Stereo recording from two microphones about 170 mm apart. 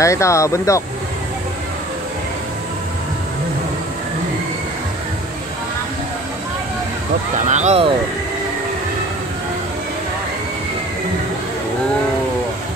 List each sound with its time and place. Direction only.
0.0 s speech: 15° left (ahead or behind)
7.3 s speech: 45° right (ahead or behind)